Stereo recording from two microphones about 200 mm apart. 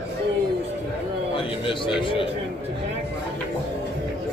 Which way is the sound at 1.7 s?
25° left (ahead or behind).